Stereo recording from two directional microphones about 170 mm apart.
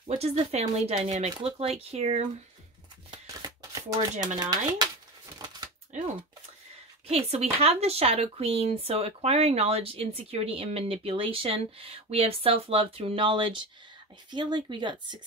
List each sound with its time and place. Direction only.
0.0 s speech: 45° right (ahead or behind)
3.1 s shuffling cards: 20° right (ahead or behind)
4.4 s speech: 20° right (ahead or behind)
5.4 s a sound: 25° right (ahead or behind)
7.1 s speech: 40° right (ahead or behind)